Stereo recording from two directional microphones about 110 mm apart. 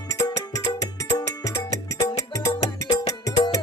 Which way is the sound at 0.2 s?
30° left (ahead or behind).